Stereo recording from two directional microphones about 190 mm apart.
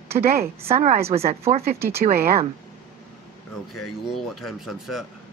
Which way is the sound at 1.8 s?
15° right (ahead or behind).